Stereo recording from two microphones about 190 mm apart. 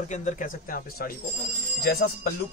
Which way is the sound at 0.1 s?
40° left (ahead or behind).